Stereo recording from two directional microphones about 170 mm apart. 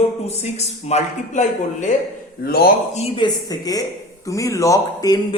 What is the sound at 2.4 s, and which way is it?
Speech, 65° left (ahead or behind).